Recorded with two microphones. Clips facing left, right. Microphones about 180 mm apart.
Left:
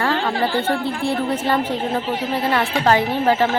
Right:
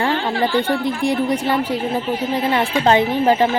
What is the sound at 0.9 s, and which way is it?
Speech, 15° right (ahead or behind).